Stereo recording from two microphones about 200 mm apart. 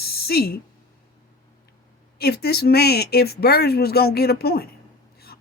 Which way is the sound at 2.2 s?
50° left (ahead or behind).